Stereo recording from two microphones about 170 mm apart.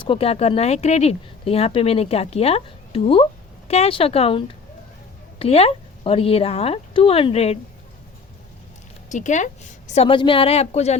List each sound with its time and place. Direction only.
0.0 s speech: 30° left (ahead or behind)
9.0 s speech: 45° left (ahead or behind)